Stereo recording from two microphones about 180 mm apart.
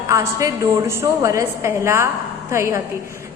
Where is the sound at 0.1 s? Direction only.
15° right (ahead or behind).